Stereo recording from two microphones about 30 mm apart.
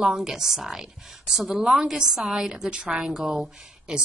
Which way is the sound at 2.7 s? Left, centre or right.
Right.